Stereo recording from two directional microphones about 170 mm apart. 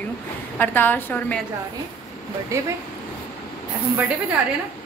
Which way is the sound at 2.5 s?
20° right (ahead or behind).